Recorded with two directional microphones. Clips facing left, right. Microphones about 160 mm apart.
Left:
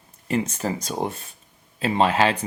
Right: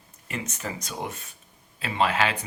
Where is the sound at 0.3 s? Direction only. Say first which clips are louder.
Left 9 dB; 30° left (ahead or behind).